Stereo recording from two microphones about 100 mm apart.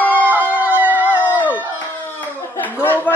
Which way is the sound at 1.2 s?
15° left (ahead or behind).